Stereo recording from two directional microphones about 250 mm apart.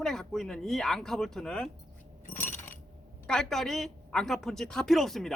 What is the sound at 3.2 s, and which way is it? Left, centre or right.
Speech, centre.